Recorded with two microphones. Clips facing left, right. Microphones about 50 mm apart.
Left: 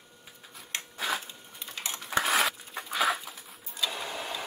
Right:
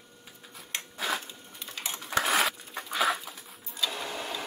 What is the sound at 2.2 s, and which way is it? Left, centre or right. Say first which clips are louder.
Sewing machine: even; centre.